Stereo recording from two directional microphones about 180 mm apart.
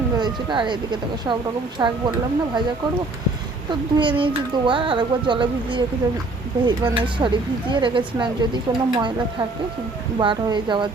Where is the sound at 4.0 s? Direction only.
25° right (ahead or behind).